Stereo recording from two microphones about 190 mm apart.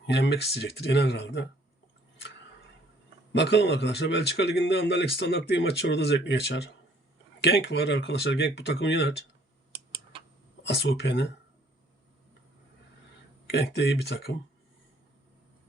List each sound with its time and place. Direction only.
0.0 s speech: 65° left (ahead or behind)
3.3 s speech: 65° left (ahead or behind)
10.6 s speech: 65° left (ahead or behind)
13.5 s speech: 65° left (ahead or behind)